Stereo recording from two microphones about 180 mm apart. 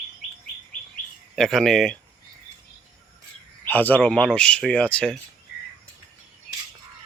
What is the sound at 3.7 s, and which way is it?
Speech, 10° left (ahead or behind).